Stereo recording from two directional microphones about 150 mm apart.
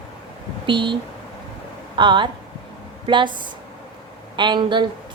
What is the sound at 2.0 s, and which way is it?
A woman's voice, 30° right (ahead or behind).